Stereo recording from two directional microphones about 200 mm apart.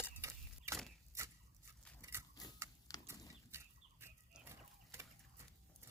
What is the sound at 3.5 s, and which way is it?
Chicken, 10° right (ahead or behind).